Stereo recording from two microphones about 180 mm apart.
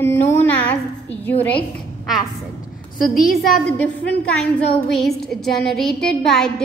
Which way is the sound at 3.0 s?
55° left (ahead or behind).